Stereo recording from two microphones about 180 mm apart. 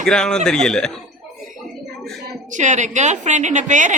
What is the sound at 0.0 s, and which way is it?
Speech, 5° left (ahead or behind).